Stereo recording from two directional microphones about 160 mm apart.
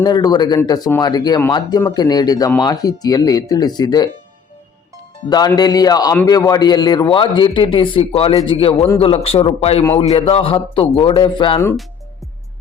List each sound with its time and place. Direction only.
0.0 s a man's voice: 25° left (ahead or behind)
5.5 s a man's voice: 25° left (ahead or behind)